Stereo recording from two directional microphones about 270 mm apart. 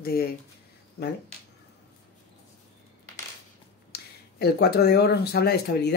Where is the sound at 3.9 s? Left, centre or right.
Left.